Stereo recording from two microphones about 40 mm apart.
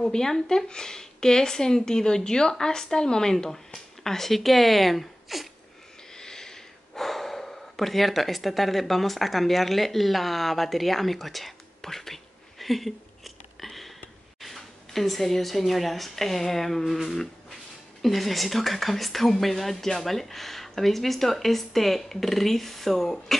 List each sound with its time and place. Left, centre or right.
0.0 s a woman's voice: centre
6.1 s a sound: centre
14.4 s a woman's voice: centre